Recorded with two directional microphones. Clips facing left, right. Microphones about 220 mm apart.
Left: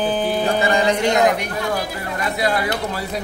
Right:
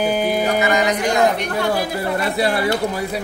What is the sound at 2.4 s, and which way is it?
Speech, 30° right (ahead or behind).